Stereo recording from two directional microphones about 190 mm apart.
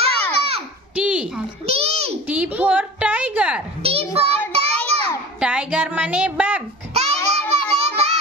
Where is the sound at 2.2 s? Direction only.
5° right (ahead or behind).